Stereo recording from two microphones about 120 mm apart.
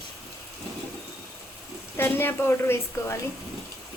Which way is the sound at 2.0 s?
20° left (ahead or behind).